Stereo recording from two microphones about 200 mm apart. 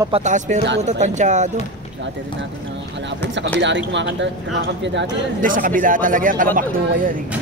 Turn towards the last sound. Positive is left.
turn(degrees=-45)  # may be behind; listen again after turning